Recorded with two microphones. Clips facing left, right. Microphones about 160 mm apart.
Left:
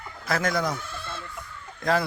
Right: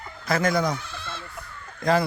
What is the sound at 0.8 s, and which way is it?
Chicken, 50° left (ahead or behind).